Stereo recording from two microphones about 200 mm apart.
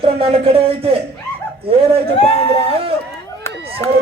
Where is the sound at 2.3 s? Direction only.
30° left (ahead or behind).